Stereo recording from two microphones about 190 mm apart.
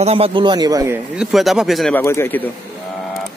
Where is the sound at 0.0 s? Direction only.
30° right (ahead or behind).